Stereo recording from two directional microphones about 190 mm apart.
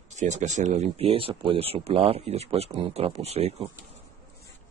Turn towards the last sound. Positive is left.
turn(degrees=-35)  # may be behind; listen again after turning